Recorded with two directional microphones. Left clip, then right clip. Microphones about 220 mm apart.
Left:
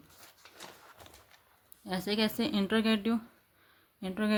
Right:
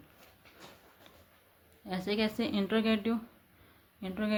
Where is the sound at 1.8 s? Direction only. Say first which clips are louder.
Left 1 dB; 25° left (ahead or behind).